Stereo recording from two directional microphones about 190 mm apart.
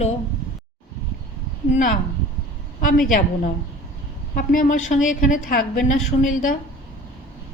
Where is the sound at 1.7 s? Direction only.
40° left (ahead or behind).